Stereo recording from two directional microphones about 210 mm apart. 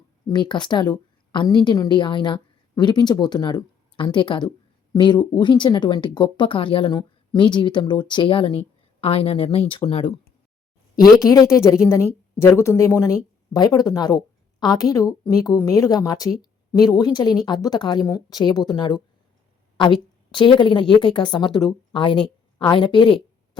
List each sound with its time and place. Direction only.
0.3 s a woman's voice: 20° left (ahead or behind)
11.2 s a woman's voice: 15° left (ahead or behind)